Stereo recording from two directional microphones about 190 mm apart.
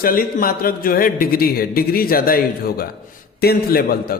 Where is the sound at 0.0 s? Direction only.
50° left (ahead or behind).